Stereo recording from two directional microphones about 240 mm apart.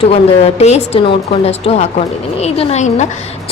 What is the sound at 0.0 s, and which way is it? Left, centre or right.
A woman's voice, left.